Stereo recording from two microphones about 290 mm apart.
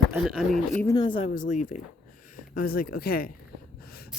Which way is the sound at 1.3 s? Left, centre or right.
Left.